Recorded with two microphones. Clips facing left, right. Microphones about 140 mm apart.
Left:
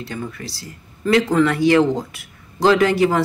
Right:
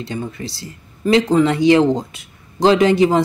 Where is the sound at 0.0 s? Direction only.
20° right (ahead or behind).